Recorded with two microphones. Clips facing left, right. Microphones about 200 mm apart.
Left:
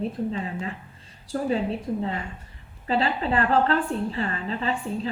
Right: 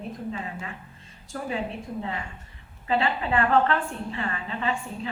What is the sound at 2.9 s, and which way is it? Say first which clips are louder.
A woman's voice: left 1 dB; 35° left (ahead or behind).